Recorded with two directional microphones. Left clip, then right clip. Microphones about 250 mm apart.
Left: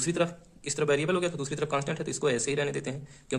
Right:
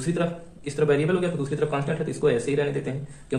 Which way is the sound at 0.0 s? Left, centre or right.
Left.